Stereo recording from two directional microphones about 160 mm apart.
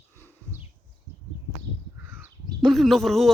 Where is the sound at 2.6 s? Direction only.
Centre (ahead or behind).